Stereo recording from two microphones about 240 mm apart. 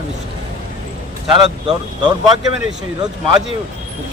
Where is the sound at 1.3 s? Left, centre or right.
Centre.